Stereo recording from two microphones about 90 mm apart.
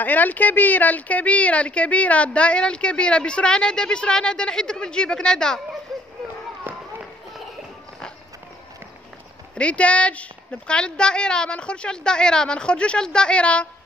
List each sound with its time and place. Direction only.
0.0 s speech: 20° left (ahead or behind)
6.7 s a sound: 20° right (ahead or behind)
9.6 s speech: 15° left (ahead or behind)